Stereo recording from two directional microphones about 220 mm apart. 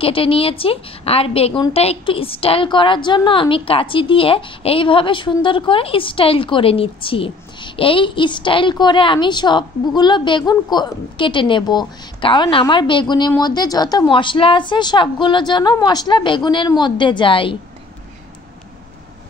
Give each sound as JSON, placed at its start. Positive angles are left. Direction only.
{"t": 0.0, "sound": "a woman's voice", "side_deg": 25}